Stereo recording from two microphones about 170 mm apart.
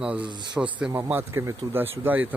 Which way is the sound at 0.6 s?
10° right (ahead or behind).